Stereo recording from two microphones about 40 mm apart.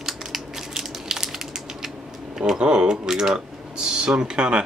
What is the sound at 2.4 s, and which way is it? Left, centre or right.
Speech, centre.